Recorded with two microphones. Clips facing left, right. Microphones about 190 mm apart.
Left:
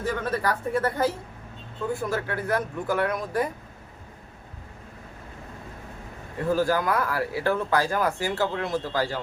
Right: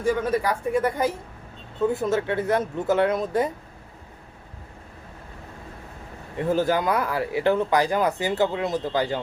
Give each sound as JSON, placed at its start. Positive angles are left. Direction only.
{"t": 0.0, "sound": "speech", "side_deg": -10}
{"t": 6.5, "sound": "speech", "side_deg": -20}